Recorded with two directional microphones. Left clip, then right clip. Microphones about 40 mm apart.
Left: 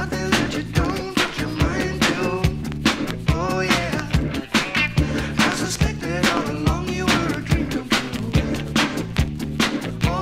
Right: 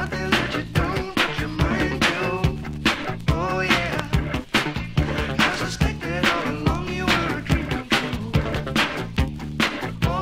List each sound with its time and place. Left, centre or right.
0.3 s music: left